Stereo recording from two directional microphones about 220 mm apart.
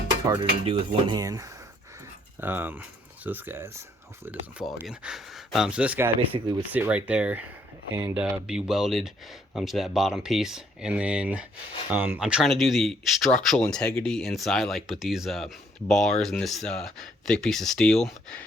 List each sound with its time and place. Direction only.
0.3 s speech: 25° right (ahead or behind); by 18.4 s 5° left (ahead or behind)